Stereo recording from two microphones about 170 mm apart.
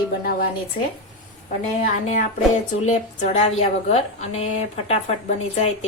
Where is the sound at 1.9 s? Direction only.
50° left (ahead or behind).